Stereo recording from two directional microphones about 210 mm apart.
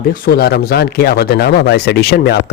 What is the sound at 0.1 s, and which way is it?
A man's voice, 50° left (ahead or behind).